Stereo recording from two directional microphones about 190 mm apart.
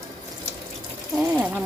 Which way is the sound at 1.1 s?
5° right (ahead or behind).